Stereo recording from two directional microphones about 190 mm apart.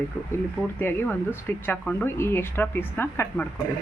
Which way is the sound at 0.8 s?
10° left (ahead or behind).